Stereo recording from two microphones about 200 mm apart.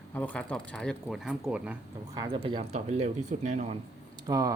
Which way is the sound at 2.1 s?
20° right (ahead or behind).